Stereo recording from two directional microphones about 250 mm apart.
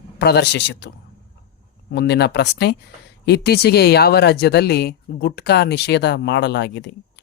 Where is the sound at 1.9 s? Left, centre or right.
Left.